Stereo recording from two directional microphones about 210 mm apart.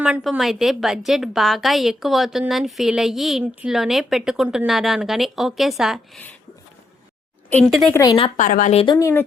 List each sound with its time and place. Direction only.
0.0 s a woman's voice: centre (ahead or behind)
7.5 s a woman's voice: 5° left (ahead or behind)
7.9 s a woman's voice: 20° left (ahead or behind)
8.4 s a woman's voice: 40° left (ahead or behind)
8.7 s a woman's voice: 25° left (ahead or behind)
9.0 s speech: 15° left (ahead or behind)